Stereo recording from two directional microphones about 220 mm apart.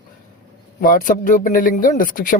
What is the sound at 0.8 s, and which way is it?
Speech, 40° left (ahead or behind).